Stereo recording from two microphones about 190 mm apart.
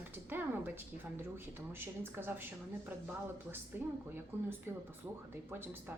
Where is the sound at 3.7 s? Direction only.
10° right (ahead or behind).